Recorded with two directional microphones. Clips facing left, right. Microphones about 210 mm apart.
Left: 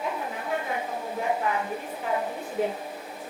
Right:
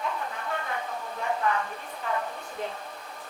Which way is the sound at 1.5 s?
5° left (ahead or behind).